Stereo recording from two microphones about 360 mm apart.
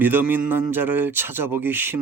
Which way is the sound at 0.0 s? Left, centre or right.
Centre.